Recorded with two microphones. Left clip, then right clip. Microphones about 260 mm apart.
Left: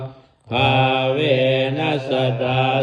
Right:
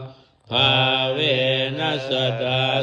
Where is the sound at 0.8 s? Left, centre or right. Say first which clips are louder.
Left 2 dB; right.